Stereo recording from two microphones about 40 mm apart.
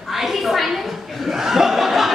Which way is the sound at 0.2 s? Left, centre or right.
Centre.